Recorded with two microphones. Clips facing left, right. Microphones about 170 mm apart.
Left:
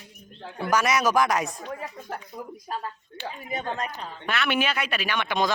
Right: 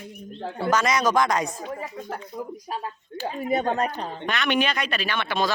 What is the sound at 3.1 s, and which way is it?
Speech, 40° right (ahead or behind).